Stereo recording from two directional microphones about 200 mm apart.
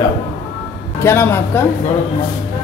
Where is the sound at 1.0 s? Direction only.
15° left (ahead or behind).